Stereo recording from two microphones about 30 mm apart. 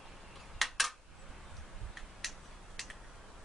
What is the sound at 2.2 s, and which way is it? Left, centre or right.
Tick-tock, centre.